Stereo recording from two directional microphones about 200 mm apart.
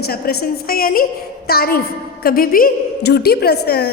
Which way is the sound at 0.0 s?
50° left (ahead or behind).